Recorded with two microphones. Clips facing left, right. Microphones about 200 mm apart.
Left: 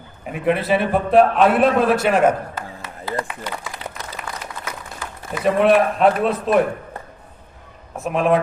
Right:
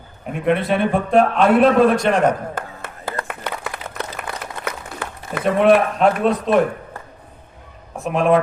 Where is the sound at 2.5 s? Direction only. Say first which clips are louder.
Right 2 dB; 50° right (ahead or behind).